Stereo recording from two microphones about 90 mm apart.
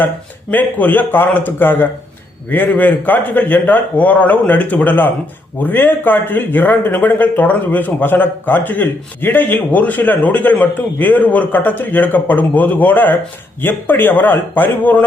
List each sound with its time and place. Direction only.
0.5 s speech: 20° left (ahead or behind)